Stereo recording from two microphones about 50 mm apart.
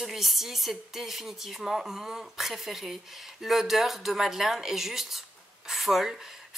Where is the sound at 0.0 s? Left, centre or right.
Centre.